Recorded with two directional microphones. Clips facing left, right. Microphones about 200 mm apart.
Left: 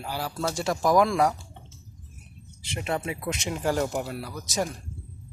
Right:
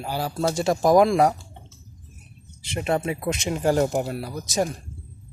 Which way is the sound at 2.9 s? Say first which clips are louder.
Right 5 dB; 35° right (ahead or behind).